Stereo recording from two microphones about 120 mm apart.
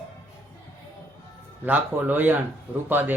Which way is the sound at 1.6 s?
15° right (ahead or behind).